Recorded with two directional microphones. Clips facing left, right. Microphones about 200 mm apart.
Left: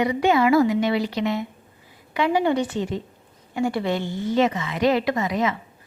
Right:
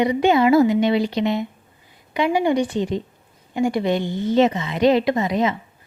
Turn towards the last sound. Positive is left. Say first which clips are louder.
# right 3 dB
turn(degrees=-25)  # may be behind; listen again after turning